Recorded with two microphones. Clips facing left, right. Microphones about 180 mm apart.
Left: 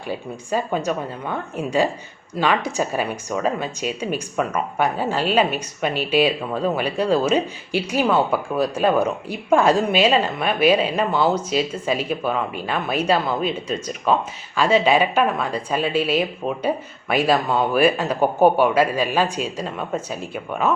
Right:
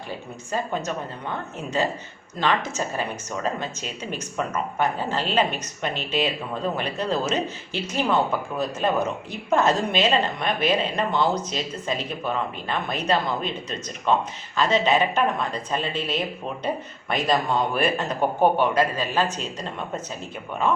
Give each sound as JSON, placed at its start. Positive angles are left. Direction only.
{"t": 0.5, "sound": "speech", "side_deg": 10}